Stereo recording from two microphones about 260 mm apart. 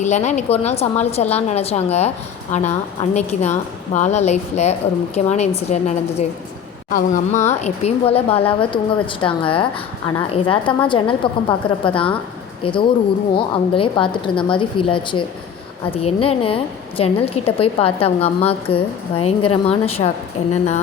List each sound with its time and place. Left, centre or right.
0.0 s a woman's voice: left